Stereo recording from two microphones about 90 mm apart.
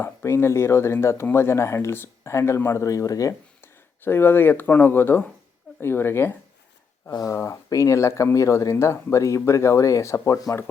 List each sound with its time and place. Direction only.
0.0 s speech: 30° left (ahead or behind)
3.6 s speech: 25° left (ahead or behind)
7.1 s speech: 45° left (ahead or behind)
7.3 s speech: 30° left (ahead or behind)